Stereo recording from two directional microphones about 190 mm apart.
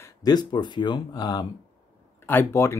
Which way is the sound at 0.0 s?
20° left (ahead or behind).